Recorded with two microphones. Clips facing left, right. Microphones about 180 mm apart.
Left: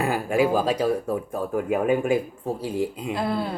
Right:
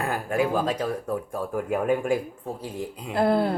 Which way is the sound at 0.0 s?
10° left (ahead or behind).